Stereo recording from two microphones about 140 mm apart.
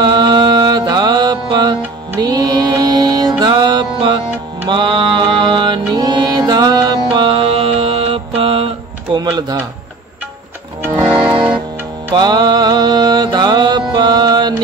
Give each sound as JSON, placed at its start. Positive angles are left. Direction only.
{"t": 0.0, "sound": "music", "side_deg": -35}
{"t": 4.6, "sound": "mantra", "side_deg": -35}
{"t": 9.1, "sound": "typing", "side_deg": -30}
{"t": 12.2, "sound": "mantra", "side_deg": -30}